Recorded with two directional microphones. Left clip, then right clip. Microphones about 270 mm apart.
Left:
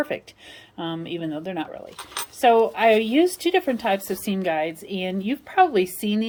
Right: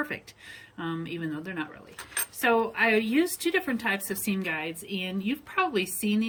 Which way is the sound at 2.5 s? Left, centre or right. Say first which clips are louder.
Left 7 dB; right.